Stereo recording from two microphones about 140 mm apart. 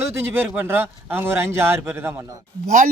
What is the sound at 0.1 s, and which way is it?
A man's voice, 15° right (ahead or behind).